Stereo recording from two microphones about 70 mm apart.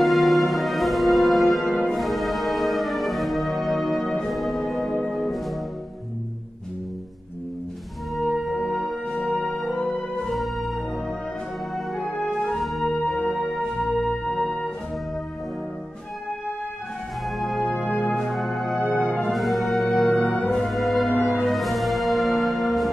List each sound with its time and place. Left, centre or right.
0.0 s music: centre
8.2 s music: centre
10.3 s music: centre
17.4 s music: centre
17.7 s music: centre
18.2 s music: centre
19.0 s music: centre
19.3 s music: centre
20.3 s music: centre
20.6 s music: centre